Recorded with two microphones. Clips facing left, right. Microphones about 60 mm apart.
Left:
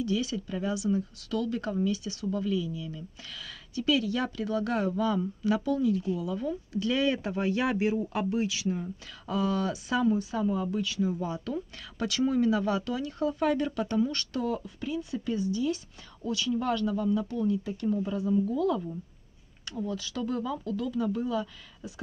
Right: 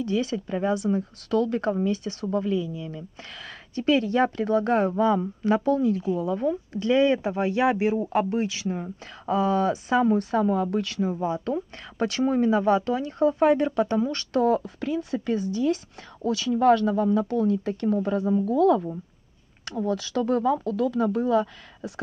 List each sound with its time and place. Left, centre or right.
0.0 s speech: right
6.8 s speech: right
10.1 s speech: right
11.0 s speech: right
14.3 s speech: right